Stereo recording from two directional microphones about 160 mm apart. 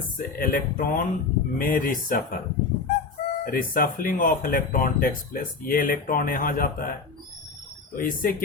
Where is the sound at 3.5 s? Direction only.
60° left (ahead or behind).